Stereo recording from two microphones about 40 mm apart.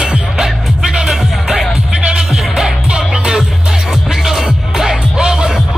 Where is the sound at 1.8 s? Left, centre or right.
Right.